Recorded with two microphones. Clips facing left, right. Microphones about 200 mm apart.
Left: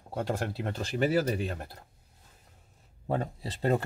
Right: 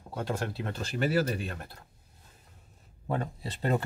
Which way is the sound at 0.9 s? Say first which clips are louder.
Left 1 dB; 15° left (ahead or behind).